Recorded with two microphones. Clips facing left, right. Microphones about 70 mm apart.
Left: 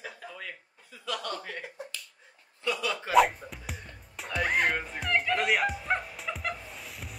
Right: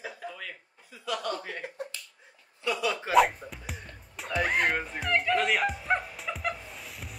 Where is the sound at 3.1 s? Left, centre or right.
Centre.